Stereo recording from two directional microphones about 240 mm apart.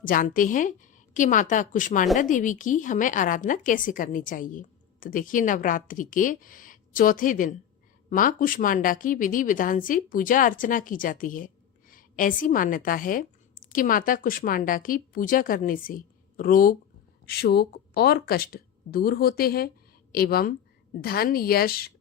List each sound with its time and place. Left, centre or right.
0.0 s a woman's voice: left